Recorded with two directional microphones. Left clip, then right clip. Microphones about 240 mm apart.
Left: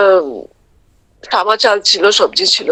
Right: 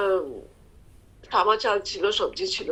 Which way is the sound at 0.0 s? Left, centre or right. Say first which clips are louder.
Left 14 dB; left.